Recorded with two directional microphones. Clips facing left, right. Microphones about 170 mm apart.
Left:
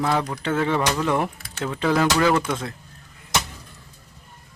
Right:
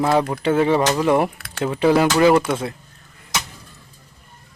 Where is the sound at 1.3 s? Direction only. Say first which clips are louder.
Right 4 dB; 65° right (ahead or behind).